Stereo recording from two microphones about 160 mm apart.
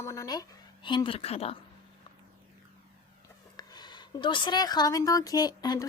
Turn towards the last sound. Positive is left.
turn(degrees=25)  # may be behind; listen again after turning